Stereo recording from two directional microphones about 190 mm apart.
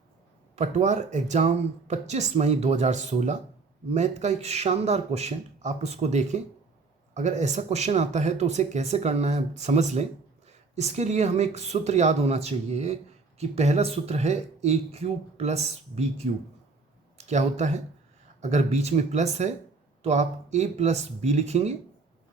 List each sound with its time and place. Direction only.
0.5 s speech: 40° right (ahead or behind)